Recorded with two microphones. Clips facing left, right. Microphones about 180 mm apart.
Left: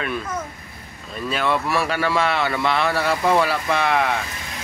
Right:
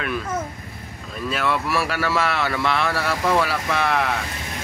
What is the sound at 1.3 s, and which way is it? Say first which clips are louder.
Speech: left 1 dB; centre (ahead or behind).